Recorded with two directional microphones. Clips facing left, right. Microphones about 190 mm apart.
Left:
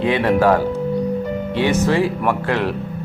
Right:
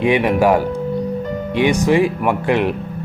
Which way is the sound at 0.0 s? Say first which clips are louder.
Right 1 dB; 15° right (ahead or behind).